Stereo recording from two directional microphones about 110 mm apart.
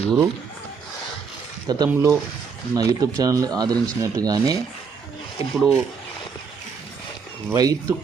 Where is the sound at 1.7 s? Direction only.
35° right (ahead or behind).